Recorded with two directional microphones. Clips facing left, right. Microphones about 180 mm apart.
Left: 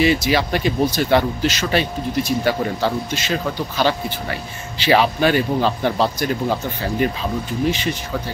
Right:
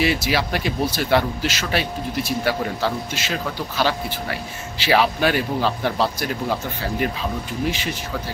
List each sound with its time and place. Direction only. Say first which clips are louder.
0.0 s speech: left 4 dB; 5° right (ahead or behind)
7.6 s speech: left 4 dB; 5° right (ahead or behind)